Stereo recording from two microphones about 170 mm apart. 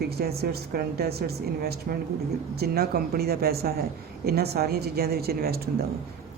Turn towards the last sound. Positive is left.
turn(degrees=-65)  # may be behind; listen again after turning